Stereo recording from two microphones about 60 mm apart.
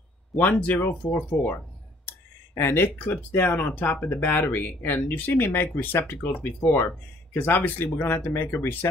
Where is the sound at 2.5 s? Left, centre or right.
Left.